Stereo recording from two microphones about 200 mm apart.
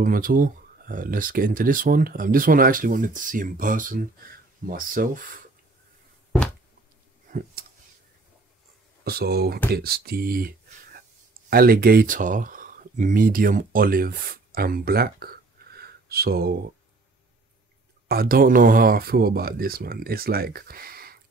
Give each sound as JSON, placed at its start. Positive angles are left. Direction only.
{"t": 0.0, "sound": "speech", "side_deg": -45}
{"t": 7.2, "sound": "a sound", "side_deg": -45}
{"t": 9.0, "sound": "speech", "side_deg": -50}
{"t": 18.0, "sound": "speech", "side_deg": -50}